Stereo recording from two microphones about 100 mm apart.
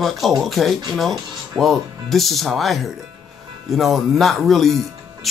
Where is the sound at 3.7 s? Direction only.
Centre (ahead or behind).